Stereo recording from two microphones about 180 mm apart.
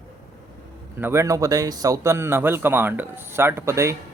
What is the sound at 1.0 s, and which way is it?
Speech, 15° right (ahead or behind).